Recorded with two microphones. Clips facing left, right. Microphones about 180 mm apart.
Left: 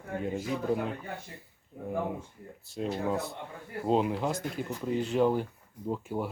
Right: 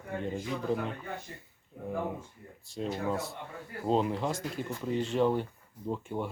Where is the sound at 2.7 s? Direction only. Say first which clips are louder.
Left 2 dB; centre (ahead or behind).